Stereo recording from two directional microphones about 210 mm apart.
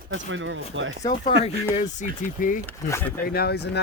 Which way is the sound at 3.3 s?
50° left (ahead or behind).